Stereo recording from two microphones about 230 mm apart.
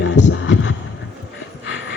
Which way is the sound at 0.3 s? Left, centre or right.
Left.